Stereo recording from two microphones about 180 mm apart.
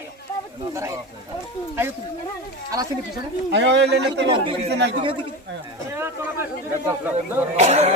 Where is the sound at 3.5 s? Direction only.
75° right (ahead or behind).